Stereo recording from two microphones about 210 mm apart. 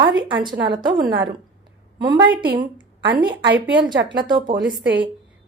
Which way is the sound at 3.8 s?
20° right (ahead or behind).